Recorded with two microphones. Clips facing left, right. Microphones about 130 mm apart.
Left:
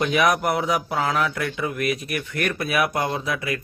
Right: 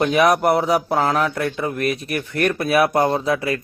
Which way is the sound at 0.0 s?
35° right (ahead or behind).